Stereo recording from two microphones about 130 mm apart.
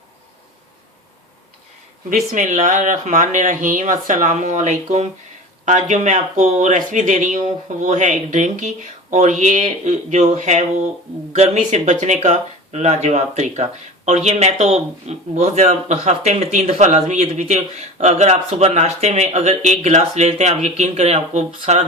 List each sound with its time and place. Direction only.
2.3 s speech: 75° right (ahead or behind)